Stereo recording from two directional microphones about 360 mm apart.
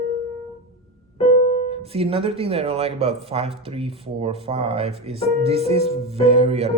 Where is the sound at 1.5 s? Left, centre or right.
Centre.